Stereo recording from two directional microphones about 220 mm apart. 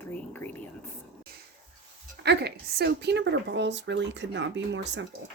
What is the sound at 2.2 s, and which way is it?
Speech, 50° right (ahead or behind).